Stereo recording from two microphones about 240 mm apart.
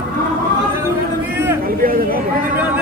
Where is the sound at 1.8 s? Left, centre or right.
Right.